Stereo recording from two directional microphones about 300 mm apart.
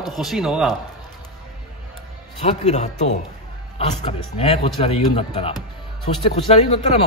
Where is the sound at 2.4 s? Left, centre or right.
Left.